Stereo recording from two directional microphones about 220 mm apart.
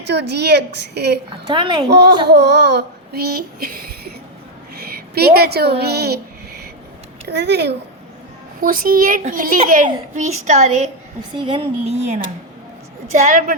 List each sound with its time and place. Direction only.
0.1 s child singing: 50° right (ahead or behind)
1.3 s speech: 20° right (ahead or behind)
1.9 s child singing: 50° right (ahead or behind)
4.7 s speech: 45° right (ahead or behind)
7.3 s child singing: 50° right (ahead or behind)
8.6 s a child's voice: 40° right (ahead or behind)
11.3 s a child's voice: 25° right (ahead or behind)